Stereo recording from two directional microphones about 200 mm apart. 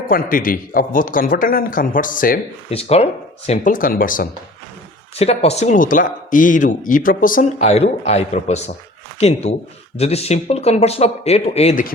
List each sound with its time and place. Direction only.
0.1 s speech: 45° left (ahead or behind)
2.6 s speech: 30° left (ahead or behind)
5.2 s speech: 30° left (ahead or behind)